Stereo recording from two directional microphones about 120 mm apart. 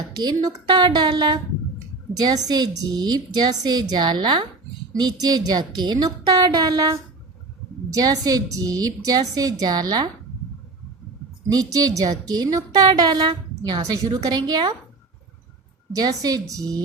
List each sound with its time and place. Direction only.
0.2 s a woman's voice: 35° right (ahead or behind)
11.4 s a woman's voice: 30° right (ahead or behind)
16.2 s a woman's voice: 30° right (ahead or behind)